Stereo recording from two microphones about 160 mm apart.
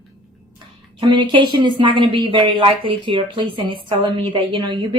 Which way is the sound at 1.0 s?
30° right (ahead or behind).